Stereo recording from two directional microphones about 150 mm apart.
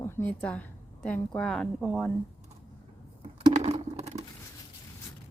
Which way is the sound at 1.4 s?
5° left (ahead or behind).